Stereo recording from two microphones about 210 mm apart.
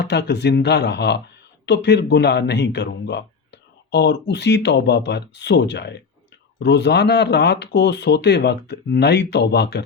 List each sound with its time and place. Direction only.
0.0 s speech: 55° left (ahead or behind)